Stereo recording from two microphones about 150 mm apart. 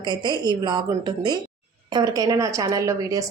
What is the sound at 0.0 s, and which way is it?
A woman's voice, 30° right (ahead or behind).